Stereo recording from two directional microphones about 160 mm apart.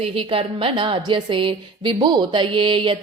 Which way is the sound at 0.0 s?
35° right (ahead or behind).